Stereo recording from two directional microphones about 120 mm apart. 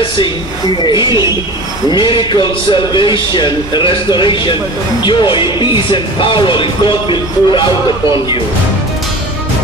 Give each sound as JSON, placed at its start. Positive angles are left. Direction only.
{"t": 0.8, "sound": "a man's voice", "side_deg": 40}